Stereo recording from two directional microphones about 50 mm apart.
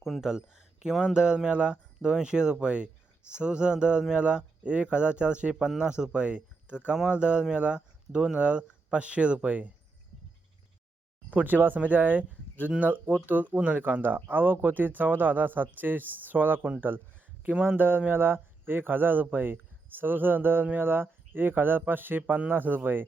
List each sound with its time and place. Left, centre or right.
0.0 s speech: centre; by 9.7 s right
11.3 s speech: right